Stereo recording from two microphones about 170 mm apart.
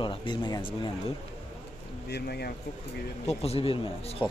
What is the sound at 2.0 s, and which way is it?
Speech, 70° left (ahead or behind).